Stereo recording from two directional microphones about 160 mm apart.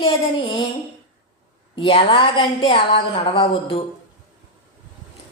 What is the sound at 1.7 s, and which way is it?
A woman's voice, 35° left (ahead or behind).